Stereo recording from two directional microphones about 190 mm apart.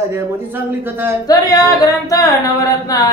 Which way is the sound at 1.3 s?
20° left (ahead or behind).